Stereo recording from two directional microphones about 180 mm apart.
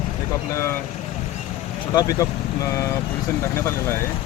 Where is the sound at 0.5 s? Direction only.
15° left (ahead or behind).